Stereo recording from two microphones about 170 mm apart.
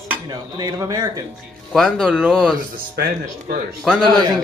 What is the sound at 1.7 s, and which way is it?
Speech, centre (ahead or behind).